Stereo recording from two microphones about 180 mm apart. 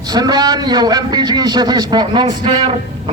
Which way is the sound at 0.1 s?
20° right (ahead or behind).